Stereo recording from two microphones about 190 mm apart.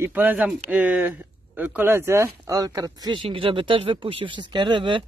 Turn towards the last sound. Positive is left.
turn(degrees=-25)  # may be behind; listen again after turning